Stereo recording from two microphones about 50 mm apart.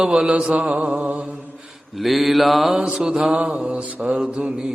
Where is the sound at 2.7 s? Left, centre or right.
Centre.